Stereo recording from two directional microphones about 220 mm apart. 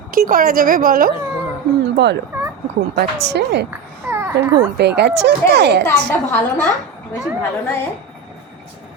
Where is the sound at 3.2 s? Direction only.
50° right (ahead or behind).